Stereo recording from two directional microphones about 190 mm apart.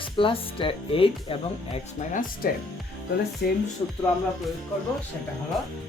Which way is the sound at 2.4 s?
50° left (ahead or behind).